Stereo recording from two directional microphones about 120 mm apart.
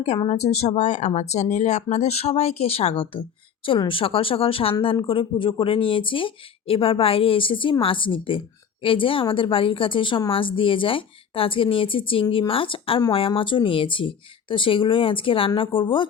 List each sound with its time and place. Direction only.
0.3 s speech: 65° left (ahead or behind); by 16.0 s 45° left (ahead or behind)